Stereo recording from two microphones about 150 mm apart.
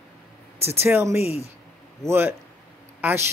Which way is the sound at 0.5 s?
40° right (ahead or behind).